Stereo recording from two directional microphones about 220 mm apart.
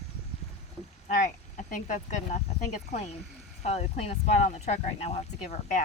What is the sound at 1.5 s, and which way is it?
Speech, 35° left (ahead or behind).